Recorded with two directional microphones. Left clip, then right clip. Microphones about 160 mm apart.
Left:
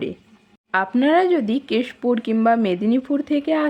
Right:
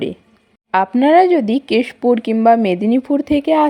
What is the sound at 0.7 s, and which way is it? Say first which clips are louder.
Speech: right 6 dB; 30° right (ahead or behind).